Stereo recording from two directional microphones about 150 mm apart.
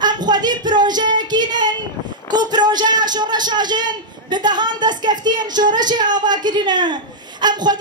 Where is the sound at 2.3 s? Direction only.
30° right (ahead or behind).